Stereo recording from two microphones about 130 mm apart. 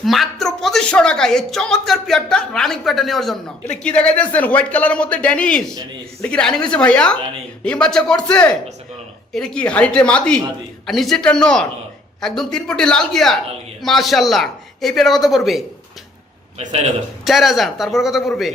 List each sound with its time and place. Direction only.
0.0 s speech: centre (ahead or behind)
16.6 s a man's voice: 55° right (ahead or behind)
17.2 s speech: centre (ahead or behind)